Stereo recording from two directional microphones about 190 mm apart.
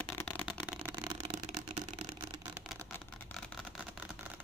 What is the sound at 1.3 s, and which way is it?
Vehicle, 35° right (ahead or behind).